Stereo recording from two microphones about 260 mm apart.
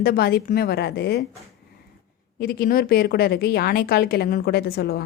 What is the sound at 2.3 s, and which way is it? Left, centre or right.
A woman's voice, left.